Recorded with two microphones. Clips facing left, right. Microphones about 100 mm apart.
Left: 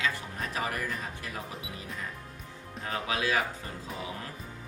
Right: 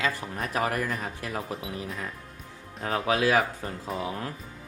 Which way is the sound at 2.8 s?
45° right (ahead or behind).